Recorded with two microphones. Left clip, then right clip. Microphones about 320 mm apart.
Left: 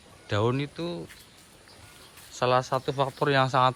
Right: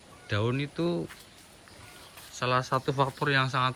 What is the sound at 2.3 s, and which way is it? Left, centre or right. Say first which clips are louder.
Speech: left 3 dB; centre.